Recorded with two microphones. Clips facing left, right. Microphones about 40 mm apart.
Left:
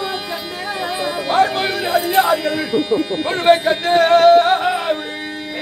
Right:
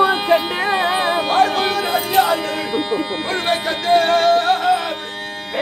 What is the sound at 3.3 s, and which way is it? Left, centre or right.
Music, centre.